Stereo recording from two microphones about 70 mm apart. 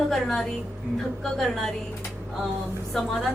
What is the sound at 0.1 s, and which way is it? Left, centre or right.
A woman's voice, centre.